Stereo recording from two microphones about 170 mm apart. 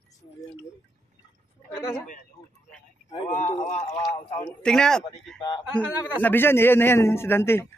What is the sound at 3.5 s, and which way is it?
Speech, 35° left (ahead or behind).